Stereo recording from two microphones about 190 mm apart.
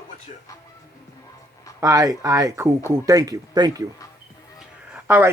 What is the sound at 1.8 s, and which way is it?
Speech, 20° right (ahead or behind).